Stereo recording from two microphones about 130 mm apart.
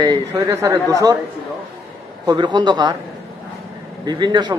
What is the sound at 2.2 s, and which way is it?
Speech, 35° right (ahead or behind).